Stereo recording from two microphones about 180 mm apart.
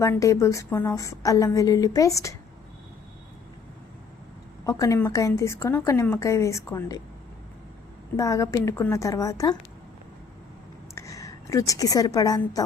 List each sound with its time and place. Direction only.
0.0 s a woman's voice: 15° left (ahead or behind)
4.6 s a woman's voice: 20° left (ahead or behind)
8.1 s a woman's voice: 15° left (ahead or behind)
10.9 s a woman's voice: 20° left (ahead or behind)